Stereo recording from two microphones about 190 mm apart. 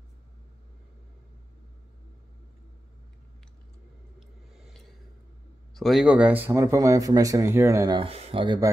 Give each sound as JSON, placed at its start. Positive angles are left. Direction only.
{"t": 5.8, "sound": "speech", "side_deg": 0}
{"t": 8.0, "sound": "speech", "side_deg": -30}